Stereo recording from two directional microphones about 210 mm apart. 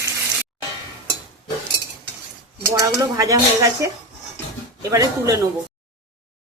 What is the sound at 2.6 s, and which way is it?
Speech, 15° right (ahead or behind).